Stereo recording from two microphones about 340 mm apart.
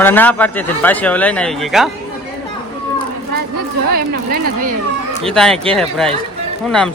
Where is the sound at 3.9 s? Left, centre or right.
Right.